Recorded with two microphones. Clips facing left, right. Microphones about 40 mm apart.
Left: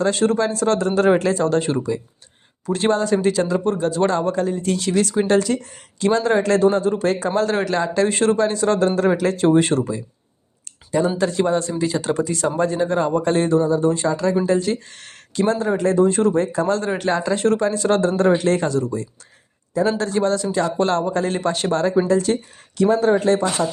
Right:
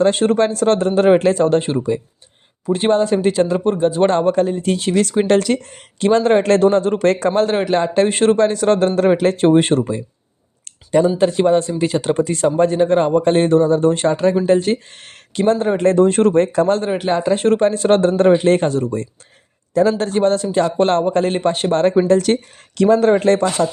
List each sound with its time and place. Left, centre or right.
0.0 s a man's voice: right
4.1 s a man's voice: right
4.9 s speech: right
6.6 s speech: right
7.8 s a man's voice: right
11.2 s a man's voice: right
16.6 s a man's voice: right
16.9 s speech: centre
17.3 s a man's voice: right
22.1 s speech: right